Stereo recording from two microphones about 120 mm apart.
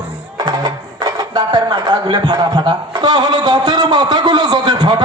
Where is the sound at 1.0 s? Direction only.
30° right (ahead or behind).